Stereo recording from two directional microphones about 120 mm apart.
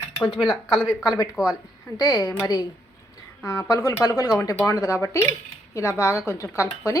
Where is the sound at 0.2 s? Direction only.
Centre (ahead or behind).